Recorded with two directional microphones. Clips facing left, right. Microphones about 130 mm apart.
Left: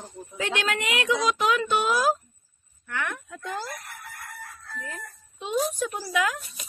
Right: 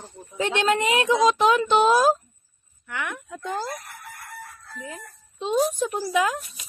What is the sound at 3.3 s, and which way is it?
Speech, 20° right (ahead or behind).